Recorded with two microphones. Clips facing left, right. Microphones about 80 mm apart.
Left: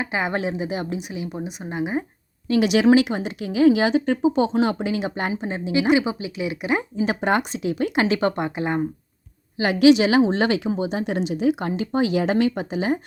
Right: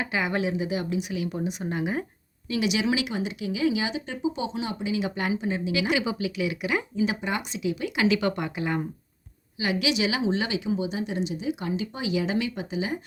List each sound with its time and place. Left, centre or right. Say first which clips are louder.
0.0 s speech: left 2 dB; left
0.9 s speech: right 1 dB; left
2.5 s a woman's voice: left 9 dB; left
5.0 s speech: left 2 dB; left
7.2 s speech: left 8 dB; left
9.6 s a woman's voice: left 11 dB; left